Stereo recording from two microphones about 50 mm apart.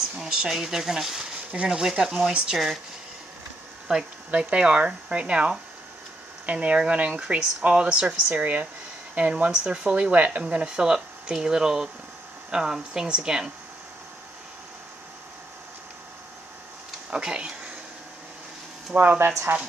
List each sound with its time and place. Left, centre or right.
0.2 s speech: centre
3.8 s speech: centre
9.9 s speech: right
10.4 s speech: centre
17.1 s speech: centre
18.9 s speech: right